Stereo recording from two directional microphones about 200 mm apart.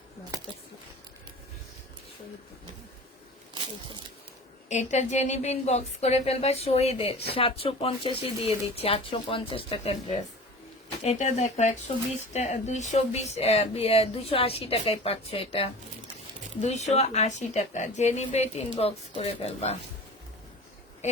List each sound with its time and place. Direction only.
4.7 s a woman's voice: 35° left (ahead or behind)